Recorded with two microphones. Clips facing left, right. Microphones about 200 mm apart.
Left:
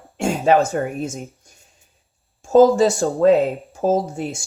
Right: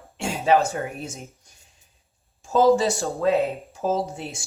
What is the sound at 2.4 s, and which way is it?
Speech, 50° left (ahead or behind).